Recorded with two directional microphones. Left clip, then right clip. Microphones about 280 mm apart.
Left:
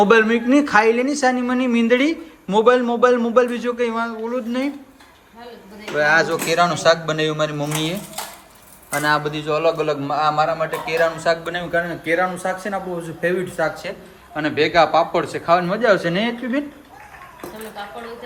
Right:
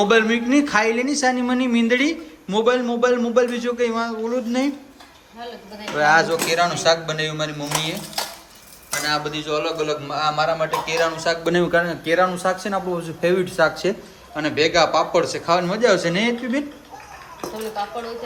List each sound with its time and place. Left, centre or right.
0.0 s speech: centre
6.0 s speech: centre
9.0 s speech: centre
13.9 s a man's voice: right
14.3 s speech: centre